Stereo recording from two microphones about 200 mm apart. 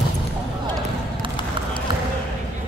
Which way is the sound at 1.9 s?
25° right (ahead or behind).